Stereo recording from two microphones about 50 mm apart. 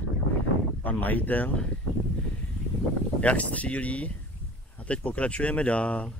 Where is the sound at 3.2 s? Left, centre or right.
Left.